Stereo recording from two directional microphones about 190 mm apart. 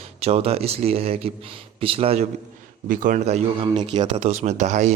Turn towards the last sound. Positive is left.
turn(degrees=-40)  # may be behind; listen again after turning